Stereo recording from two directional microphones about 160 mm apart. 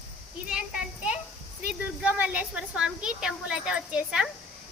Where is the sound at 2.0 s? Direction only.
10° right (ahead or behind).